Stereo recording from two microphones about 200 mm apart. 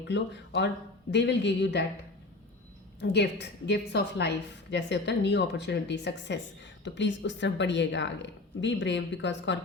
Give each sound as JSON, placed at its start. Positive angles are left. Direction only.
{"t": 0.1, "sound": "a woman's voice", "side_deg": 60}
{"t": 3.0, "sound": "a woman's voice", "side_deg": 60}